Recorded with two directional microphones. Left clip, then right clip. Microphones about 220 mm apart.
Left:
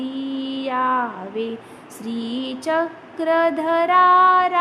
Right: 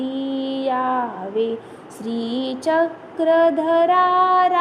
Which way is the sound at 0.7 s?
15° left (ahead or behind).